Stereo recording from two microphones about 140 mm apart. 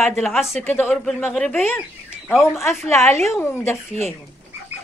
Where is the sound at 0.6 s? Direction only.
15° left (ahead or behind).